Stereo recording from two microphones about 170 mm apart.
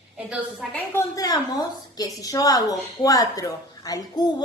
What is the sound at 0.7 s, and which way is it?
A woman's voice, 15° left (ahead or behind).